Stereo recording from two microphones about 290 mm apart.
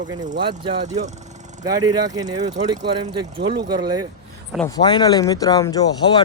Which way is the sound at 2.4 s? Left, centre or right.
Right.